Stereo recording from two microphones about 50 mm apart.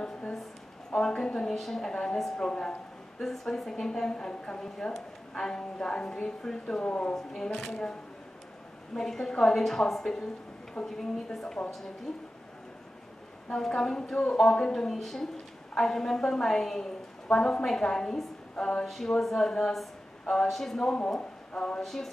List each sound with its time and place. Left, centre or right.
0.0 s a sound: centre
0.9 s a woman's voice: centre
6.8 s speech: left
7.2 s a woman's voice: centre
8.9 s a woman's voice: centre
13.5 s a woman's voice: centre
18.1 s a woman's voice: centre
21.8 s a woman's voice: centre